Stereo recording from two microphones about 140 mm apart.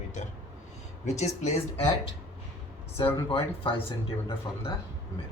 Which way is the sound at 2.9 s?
40° left (ahead or behind).